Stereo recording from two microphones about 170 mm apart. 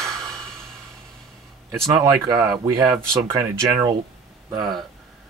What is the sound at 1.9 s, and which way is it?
Speech, 25° right (ahead or behind).